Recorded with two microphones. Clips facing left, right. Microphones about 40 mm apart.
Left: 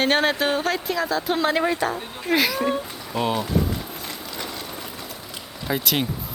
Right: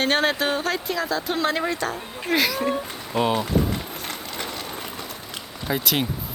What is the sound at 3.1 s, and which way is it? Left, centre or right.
Speech, right.